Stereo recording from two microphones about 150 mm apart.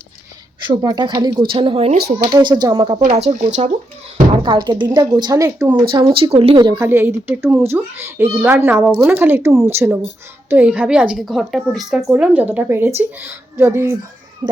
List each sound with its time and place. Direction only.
0.7 s speech: 25° right (ahead or behind); by 2.0 s 40° right (ahead or behind)
2.3 s speech: 30° right (ahead or behind)
3.0 s speech: 50° right (ahead or behind)
4.4 s a woman's voice: 30° right (ahead or behind)
5.9 s speech: 35° right (ahead or behind)
6.8 s a child's voice: 15° right (ahead or behind)